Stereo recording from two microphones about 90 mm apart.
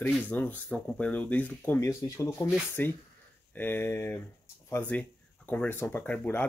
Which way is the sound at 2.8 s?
20° left (ahead or behind).